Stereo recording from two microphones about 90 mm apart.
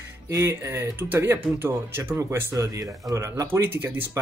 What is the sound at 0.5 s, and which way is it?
Speech, 30° right (ahead or behind).